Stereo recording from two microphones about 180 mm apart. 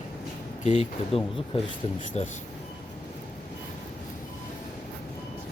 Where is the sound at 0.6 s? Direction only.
35° left (ahead or behind).